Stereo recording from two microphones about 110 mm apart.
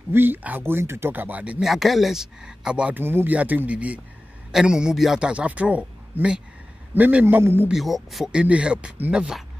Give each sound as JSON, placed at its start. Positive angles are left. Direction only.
{"t": 0.1, "sound": "speech", "side_deg": -20}
{"t": 1.7, "sound": "speech", "side_deg": 0}
{"t": 7.7, "sound": "speech", "side_deg": 0}